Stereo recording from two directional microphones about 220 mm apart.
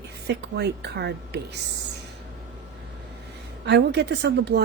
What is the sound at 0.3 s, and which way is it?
Speech, 50° right (ahead or behind).